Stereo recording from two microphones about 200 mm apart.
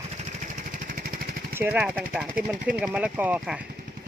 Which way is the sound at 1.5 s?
10° right (ahead or behind).